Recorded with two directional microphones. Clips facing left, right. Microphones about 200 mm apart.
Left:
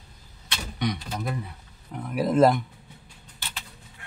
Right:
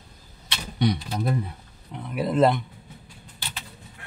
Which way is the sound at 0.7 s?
35° right (ahead or behind).